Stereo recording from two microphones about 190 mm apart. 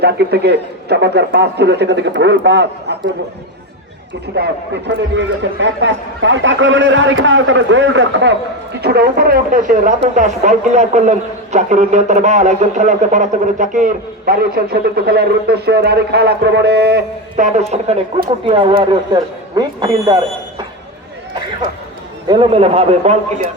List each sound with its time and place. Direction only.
0.0 s a man's voice: 60° right (ahead or behind)
4.4 s speech: 65° right (ahead or behind)
8.8 s speech: 55° right (ahead or behind)
17.4 s speech: 35° right (ahead or behind)
22.3 s speech: 30° right (ahead or behind)